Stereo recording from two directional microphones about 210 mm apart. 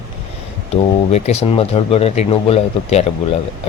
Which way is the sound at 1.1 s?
30° left (ahead or behind).